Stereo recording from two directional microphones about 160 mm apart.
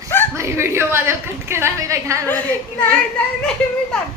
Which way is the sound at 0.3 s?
15° right (ahead or behind).